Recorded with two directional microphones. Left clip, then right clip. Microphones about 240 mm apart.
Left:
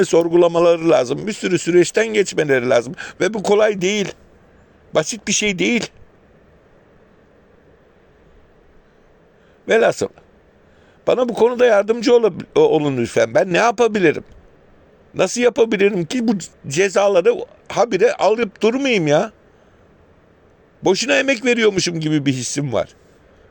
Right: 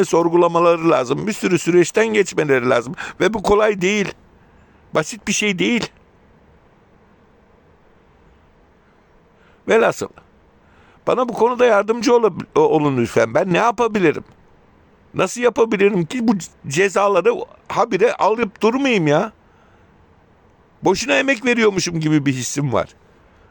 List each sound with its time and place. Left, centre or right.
0.0 s a man's voice: right
9.6 s a man's voice: right
20.8 s a man's voice: right